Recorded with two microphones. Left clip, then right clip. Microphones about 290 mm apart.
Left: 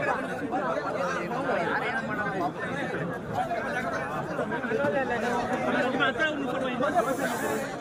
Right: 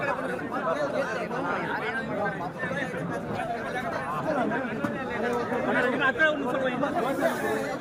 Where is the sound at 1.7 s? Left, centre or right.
Centre.